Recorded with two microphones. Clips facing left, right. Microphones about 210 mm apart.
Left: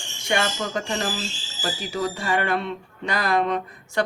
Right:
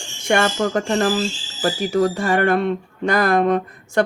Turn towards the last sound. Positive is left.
turn(degrees=-50)  # may be behind; listen again after turning